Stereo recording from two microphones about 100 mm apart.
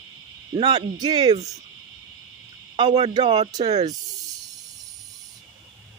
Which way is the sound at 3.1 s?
55° right (ahead or behind).